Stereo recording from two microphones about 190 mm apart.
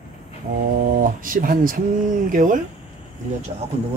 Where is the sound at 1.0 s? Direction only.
45° right (ahead or behind).